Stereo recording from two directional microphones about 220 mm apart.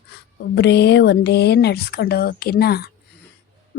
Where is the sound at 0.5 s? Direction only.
50° left (ahead or behind).